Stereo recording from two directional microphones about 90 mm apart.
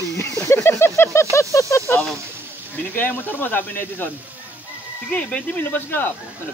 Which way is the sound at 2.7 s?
20° left (ahead or behind).